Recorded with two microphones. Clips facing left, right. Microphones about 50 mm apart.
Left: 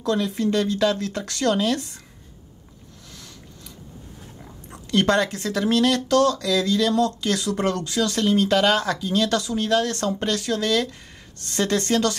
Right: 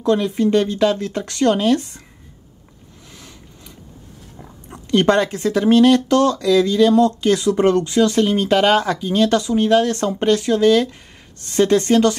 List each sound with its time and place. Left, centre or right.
0.0 s speech: right
3.1 s a sound: right
4.4 s oink: centre
4.8 s speech: right